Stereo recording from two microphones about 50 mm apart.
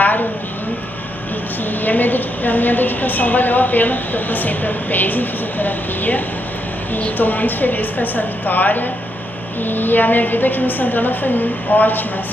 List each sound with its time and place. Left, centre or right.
1.7 s a woman's voice: left